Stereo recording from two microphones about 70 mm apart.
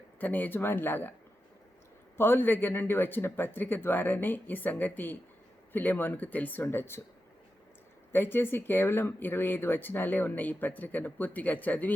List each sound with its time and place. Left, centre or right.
0.2 s speech: left
2.1 s speech: left
8.1 s speech: left